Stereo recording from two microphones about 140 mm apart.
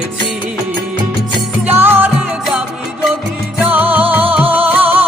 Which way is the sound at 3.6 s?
10° right (ahead or behind).